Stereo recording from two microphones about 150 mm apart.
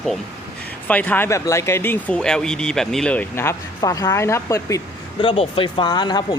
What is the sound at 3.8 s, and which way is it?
Speech, 25° left (ahead or behind).